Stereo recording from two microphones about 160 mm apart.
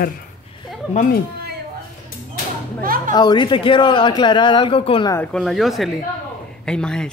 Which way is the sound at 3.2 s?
30° left (ahead or behind).